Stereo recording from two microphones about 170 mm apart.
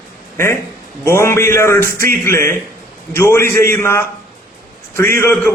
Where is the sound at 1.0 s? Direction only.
15° left (ahead or behind).